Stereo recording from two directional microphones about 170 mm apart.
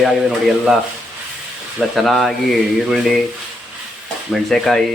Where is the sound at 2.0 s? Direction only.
Centre (ahead or behind).